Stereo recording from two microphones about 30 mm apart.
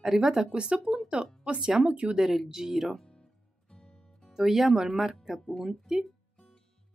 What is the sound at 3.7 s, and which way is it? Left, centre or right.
Music, left.